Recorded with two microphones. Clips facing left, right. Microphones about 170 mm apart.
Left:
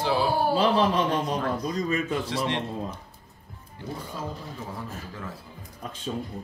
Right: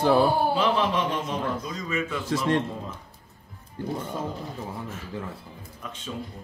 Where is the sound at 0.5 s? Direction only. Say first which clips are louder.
Left 2 dB; 35° left (ahead or behind).